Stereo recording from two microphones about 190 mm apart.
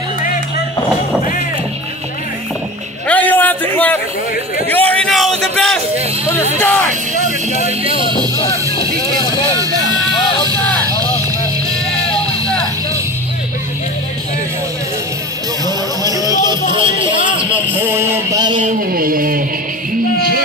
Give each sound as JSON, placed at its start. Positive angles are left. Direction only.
{"t": 3.1, "sound": "a sound", "side_deg": 10}
{"t": 6.2, "sound": "speech", "side_deg": 15}
{"t": 7.2, "sound": "vehicle", "side_deg": 40}
{"t": 9.5, "sound": "music", "side_deg": -20}
{"t": 15.6, "sound": "music", "side_deg": -20}
{"t": 16.7, "sound": "run", "side_deg": -25}
{"t": 17.4, "sound": "a man's voice", "side_deg": -10}
{"t": 18.6, "sound": "a sound", "side_deg": -45}
{"t": 20.2, "sound": "music", "side_deg": -50}